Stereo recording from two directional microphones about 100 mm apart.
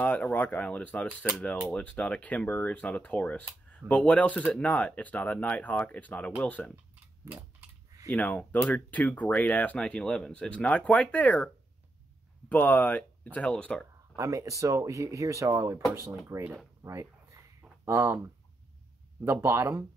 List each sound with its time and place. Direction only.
0.0 s speech: 15° left (ahead or behind)
8.1 s speech: 10° left (ahead or behind)
14.1 s speech: 30° right (ahead or behind)
16.8 s a sound: 30° right (ahead or behind)
19.2 s speech: 25° right (ahead or behind)